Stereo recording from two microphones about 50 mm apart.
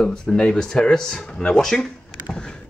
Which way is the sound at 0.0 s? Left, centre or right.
Centre.